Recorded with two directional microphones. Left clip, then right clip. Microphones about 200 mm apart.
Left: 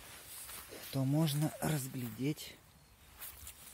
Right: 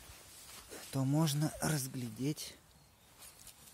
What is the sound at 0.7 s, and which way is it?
Speech, 15° right (ahead or behind).